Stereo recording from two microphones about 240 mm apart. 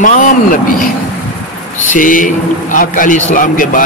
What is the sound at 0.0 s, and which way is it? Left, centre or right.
Speech, left.